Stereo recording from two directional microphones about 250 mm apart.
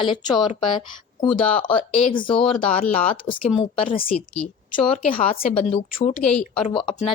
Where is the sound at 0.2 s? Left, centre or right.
Centre.